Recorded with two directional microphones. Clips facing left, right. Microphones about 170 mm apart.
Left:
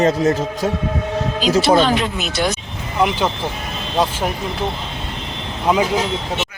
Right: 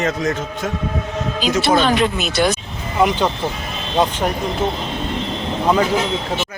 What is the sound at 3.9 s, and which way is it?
Speech, 5° left (ahead or behind).